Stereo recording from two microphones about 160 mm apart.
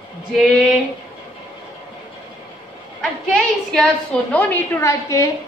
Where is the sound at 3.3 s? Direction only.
Centre (ahead or behind).